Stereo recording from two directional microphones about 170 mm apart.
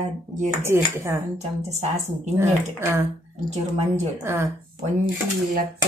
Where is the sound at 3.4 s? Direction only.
40° right (ahead or behind).